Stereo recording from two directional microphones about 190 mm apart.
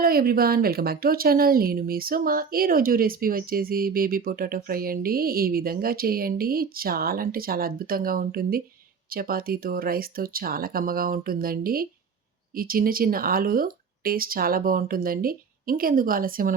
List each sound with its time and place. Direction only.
0.0 s speech: 50° right (ahead or behind)